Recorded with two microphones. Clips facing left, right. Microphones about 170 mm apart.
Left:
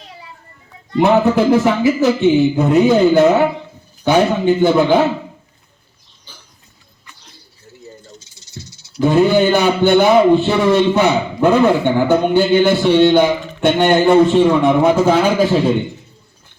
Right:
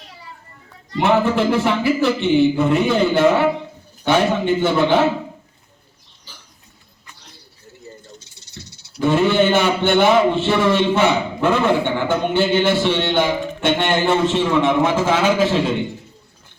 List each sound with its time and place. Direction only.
1.0 s a man's voice: 40° left (ahead or behind)
8.2 s snake: 60° right (ahead or behind)
9.0 s a man's voice: 40° left (ahead or behind)